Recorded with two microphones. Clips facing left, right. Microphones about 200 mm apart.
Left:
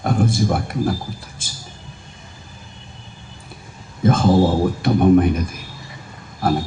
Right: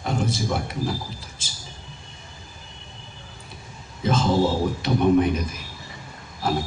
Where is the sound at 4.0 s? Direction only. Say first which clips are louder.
Left 6 dB; 50° left (ahead or behind).